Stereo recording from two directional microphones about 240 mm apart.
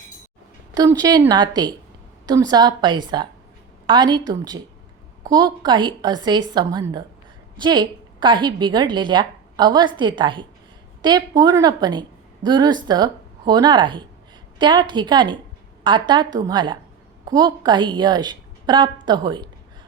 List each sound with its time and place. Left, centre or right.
0.7 s a woman's voice: centre